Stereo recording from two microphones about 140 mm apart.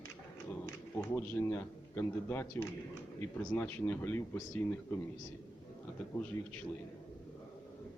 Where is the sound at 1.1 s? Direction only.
15° left (ahead or behind).